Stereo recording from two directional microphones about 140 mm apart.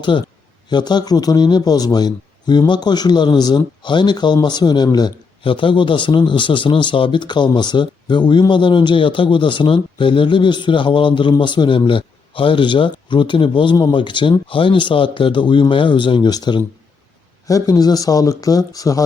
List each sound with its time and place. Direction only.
0.7 s a man's voice: 30° left (ahead or behind)